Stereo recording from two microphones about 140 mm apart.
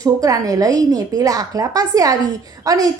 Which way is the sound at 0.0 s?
25° right (ahead or behind).